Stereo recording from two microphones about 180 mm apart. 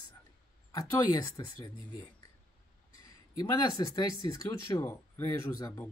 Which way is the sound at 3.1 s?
20° left (ahead or behind).